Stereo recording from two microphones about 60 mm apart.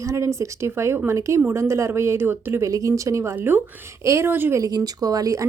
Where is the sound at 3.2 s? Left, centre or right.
Right.